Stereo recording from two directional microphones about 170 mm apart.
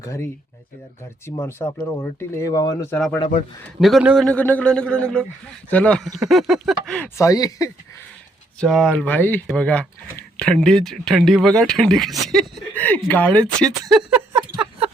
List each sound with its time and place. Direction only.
0.0 s speech: 20° left (ahead or behind)
1.4 s speech: 15° left (ahead or behind)
3.8 s speech: centre (ahead or behind)
7.3 s speech: 20° left (ahead or behind)
8.6 s speech: centre (ahead or behind)